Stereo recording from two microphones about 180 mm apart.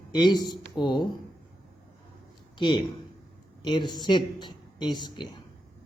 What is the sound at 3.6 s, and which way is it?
A woman's voice, 25° left (ahead or behind).